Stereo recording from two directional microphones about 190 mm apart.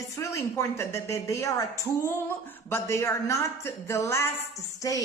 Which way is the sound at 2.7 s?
15° left (ahead or behind).